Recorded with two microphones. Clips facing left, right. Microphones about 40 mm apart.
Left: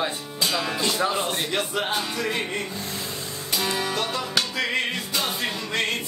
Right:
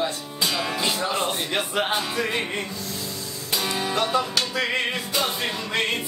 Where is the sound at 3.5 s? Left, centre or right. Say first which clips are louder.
Right 1 dB; centre.